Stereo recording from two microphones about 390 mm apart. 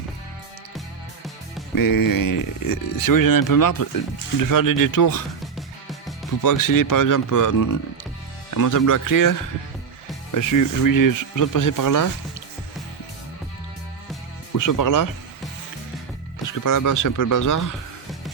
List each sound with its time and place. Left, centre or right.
1.7 s speech: left
5.5 s music: centre
6.4 s speech: left
14.5 s speech: left
16.5 s speech: left